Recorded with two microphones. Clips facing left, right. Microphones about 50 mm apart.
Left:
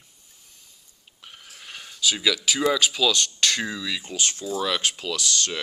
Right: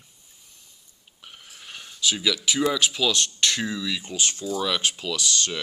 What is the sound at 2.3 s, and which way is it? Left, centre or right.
Speech, centre.